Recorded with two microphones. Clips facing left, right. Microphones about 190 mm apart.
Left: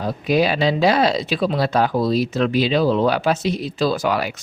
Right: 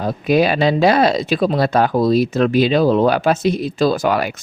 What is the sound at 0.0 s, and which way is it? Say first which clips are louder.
Speech: right 3 dB; 55° right (ahead or behind).